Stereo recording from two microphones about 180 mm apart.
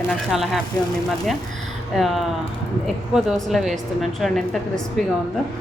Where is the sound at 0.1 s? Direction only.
Centre (ahead or behind).